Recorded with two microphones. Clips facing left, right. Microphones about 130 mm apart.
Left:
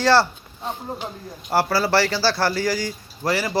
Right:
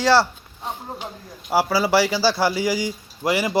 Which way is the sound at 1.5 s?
10° right (ahead or behind).